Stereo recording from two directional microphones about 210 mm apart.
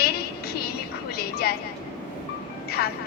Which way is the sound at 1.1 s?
45° left (ahead or behind).